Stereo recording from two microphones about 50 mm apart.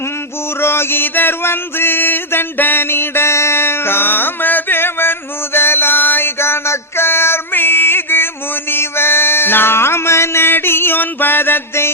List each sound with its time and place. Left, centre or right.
0.6 s mantra: left
5.5 s music: left